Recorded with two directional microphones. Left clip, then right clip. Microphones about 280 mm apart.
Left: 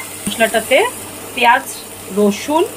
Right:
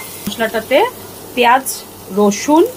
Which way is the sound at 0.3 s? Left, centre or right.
Centre.